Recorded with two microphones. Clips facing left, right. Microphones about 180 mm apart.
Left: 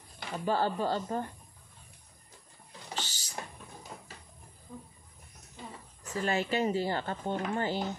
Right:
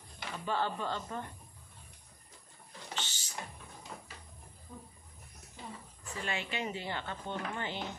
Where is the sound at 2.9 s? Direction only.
40° left (ahead or behind).